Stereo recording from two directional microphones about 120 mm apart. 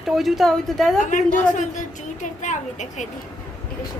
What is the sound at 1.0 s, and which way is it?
Speech, 90° left.